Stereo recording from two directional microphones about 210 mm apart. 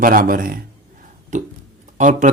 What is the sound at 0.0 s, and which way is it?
Speech, 40° right (ahead or behind).